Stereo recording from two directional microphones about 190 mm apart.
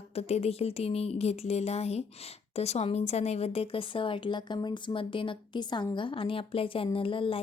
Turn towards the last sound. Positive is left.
turn(degrees=30)  # may be behind; listen again after turning